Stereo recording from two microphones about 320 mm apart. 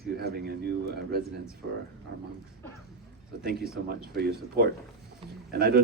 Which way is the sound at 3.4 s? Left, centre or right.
Right.